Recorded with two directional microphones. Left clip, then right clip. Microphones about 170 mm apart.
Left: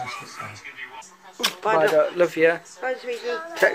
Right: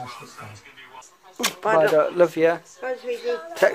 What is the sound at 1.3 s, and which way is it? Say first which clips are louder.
Speech: even; 55° right (ahead or behind).